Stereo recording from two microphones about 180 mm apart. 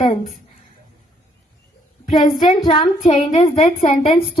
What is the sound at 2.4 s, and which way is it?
Speech, 20° left (ahead or behind).